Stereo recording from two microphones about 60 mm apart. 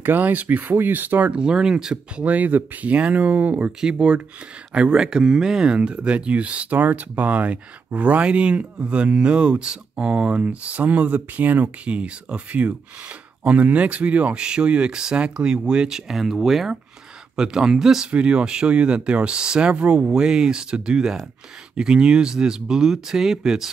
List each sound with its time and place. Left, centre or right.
0.0 s speech: right
1.3 s speech: centre
2.2 s speech: right; by 23.7 s centre